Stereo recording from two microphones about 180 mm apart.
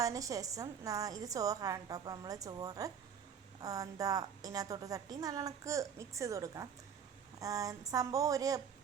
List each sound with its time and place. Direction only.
0.0 s a woman's voice: 20° right (ahead or behind)